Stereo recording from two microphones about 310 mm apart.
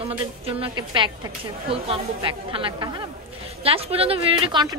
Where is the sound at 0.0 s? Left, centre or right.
Centre.